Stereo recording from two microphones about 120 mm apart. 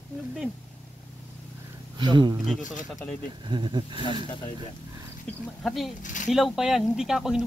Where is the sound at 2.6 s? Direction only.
90° left.